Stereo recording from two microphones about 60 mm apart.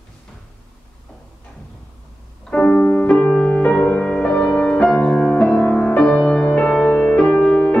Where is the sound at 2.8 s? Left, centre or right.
Left.